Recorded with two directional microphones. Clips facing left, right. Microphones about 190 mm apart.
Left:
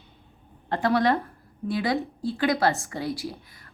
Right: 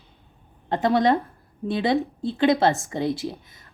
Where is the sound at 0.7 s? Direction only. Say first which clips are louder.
Right 3 dB; 20° right (ahead or behind).